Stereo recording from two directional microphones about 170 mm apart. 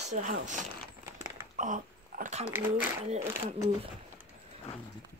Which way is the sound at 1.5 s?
50° right (ahead or behind).